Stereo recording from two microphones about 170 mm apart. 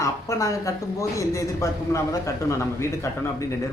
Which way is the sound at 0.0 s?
20° left (ahead or behind).